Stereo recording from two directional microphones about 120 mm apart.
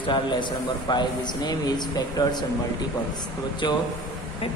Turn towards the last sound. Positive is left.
turn(degrees=35)  # may be behind; listen again after turning